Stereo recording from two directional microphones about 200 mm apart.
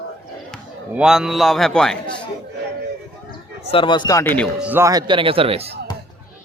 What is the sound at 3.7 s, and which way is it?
Speech, 25° left (ahead or behind).